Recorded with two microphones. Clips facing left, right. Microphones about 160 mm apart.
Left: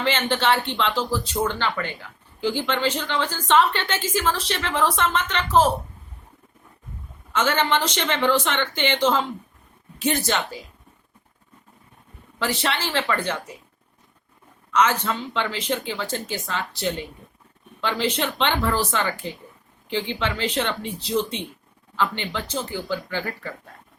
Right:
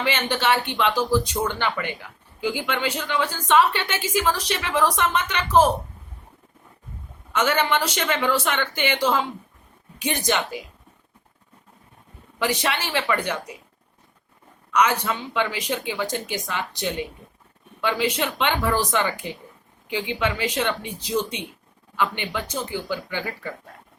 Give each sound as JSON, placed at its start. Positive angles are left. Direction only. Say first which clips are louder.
{"t": 0.0, "sound": "a woman's voice", "louder": "left 1 dB", "side_deg": -10}
{"t": 7.3, "sound": "a woman's voice", "louder": "even", "side_deg": -10}
{"t": 12.4, "sound": "a woman's voice", "louder": "right 1 dB", "side_deg": -15}
{"t": 14.7, "sound": "a woman's voice", "louder": "even", "side_deg": -10}